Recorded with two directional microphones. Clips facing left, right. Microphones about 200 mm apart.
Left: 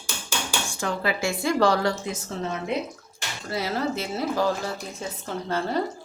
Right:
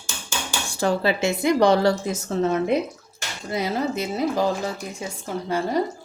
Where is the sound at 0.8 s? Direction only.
35° right (ahead or behind).